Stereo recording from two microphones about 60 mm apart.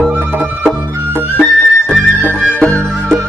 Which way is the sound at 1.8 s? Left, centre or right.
Centre.